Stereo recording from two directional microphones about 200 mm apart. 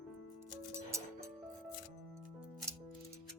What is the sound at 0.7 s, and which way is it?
Music, 15° right (ahead or behind).